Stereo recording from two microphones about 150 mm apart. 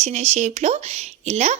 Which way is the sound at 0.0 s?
45° right (ahead or behind).